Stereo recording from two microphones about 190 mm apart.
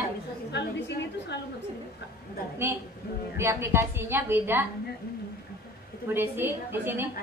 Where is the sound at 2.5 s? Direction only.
10° right (ahead or behind).